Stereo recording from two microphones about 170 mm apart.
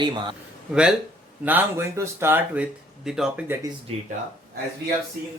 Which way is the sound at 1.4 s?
10° right (ahead or behind).